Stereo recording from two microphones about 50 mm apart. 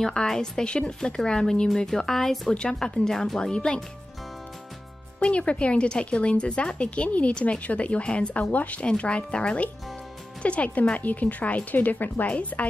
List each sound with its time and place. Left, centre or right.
0.0 s a woman's voice: centre
5.2 s a woman's voice: left